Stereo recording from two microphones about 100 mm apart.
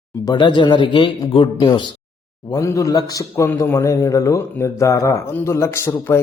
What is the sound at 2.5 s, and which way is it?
A man's voice, 30° left (ahead or behind).